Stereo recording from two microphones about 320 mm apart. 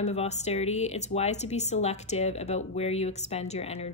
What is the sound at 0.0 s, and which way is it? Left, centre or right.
Speech, centre.